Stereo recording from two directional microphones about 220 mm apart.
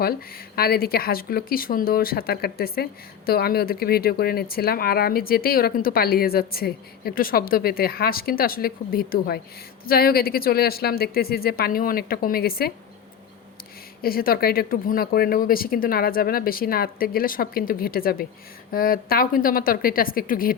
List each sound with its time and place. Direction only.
0.0 s speech: 45° left (ahead or behind)
14.0 s speech: 40° left (ahead or behind)